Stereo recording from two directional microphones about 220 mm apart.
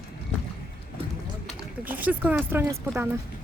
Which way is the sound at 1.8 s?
10° right (ahead or behind).